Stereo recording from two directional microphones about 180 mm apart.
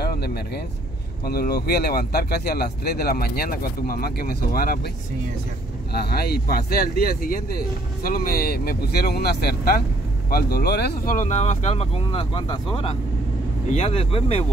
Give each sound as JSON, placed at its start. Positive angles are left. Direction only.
{"t": 0.0, "sound": "a sound", "side_deg": 60}
{"t": 1.2, "sound": "speech", "side_deg": 60}
{"t": 5.9, "sound": "speech", "side_deg": 60}
{"t": 11.1, "sound": "speech", "side_deg": 40}